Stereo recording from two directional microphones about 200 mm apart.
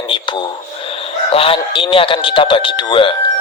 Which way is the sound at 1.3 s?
30° left (ahead or behind).